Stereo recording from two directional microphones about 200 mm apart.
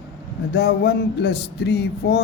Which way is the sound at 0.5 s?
55° left (ahead or behind).